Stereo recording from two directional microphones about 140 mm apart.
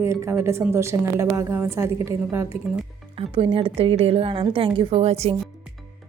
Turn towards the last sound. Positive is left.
turn(degrees=-50)  # may be behind; listen again after turning